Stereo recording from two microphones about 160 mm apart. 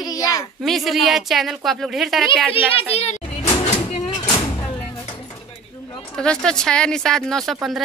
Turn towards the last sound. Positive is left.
turn(degrees=0)  # may be behind; listen again after turning